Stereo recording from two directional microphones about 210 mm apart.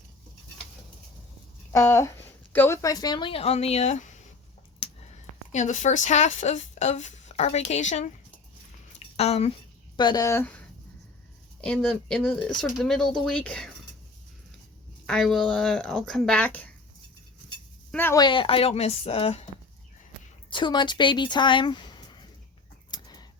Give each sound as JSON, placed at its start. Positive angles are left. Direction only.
{"t": 1.7, "sound": "a woman's voice", "side_deg": 15}
{"t": 4.8, "sound": "a sound", "side_deg": 25}
{"t": 5.5, "sound": "speech", "side_deg": 35}
{"t": 9.1, "sound": "speech", "side_deg": 30}
{"t": 10.0, "sound": "speech", "side_deg": 20}
{"t": 11.6, "sound": "speech", "side_deg": 5}
{"t": 15.0, "sound": "speech", "side_deg": 0}
{"t": 17.9, "sound": "a woman's voice", "side_deg": 10}
{"t": 20.5, "sound": "speech", "side_deg": 20}
{"t": 22.9, "sound": "chicken", "side_deg": 20}